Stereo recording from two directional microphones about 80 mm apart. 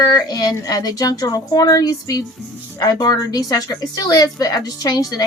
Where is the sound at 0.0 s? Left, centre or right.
Left.